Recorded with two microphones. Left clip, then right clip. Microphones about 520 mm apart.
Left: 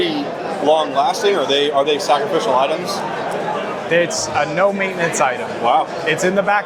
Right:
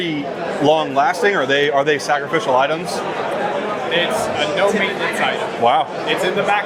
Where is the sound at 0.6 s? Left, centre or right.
Right.